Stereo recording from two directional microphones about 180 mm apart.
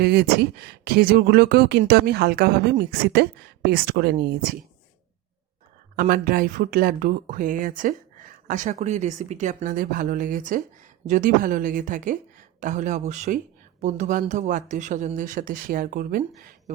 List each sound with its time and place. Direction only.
0.0 s speech: 60° right (ahead or behind)
6.0 s speech: 55° right (ahead or behind)